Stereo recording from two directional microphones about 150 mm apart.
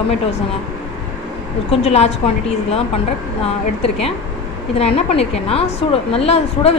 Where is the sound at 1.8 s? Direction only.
45° left (ahead or behind).